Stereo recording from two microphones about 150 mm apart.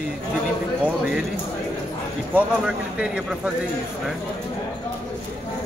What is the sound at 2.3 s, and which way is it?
Speech, 5° right (ahead or behind).